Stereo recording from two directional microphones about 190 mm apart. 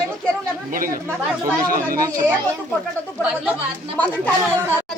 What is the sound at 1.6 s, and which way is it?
Speech, 50° right (ahead or behind).